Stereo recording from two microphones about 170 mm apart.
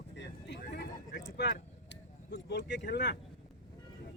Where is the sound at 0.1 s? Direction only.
90° left.